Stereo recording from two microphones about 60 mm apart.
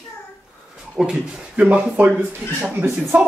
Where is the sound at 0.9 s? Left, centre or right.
Centre.